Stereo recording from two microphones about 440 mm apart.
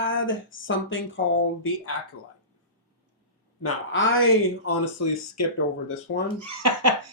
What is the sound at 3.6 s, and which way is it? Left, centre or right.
Speech, left.